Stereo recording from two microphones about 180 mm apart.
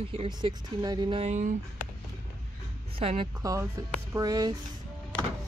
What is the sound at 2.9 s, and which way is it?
Speech, 30° right (ahead or behind).